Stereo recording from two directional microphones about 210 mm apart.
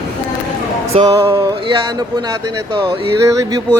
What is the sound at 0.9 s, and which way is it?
Music, 20° right (ahead or behind).